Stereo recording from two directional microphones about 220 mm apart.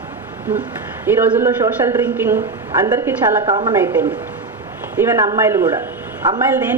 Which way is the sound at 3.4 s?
20° right (ahead or behind).